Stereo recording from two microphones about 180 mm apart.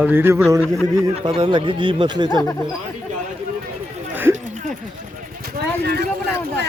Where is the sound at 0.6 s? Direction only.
15° left (ahead or behind).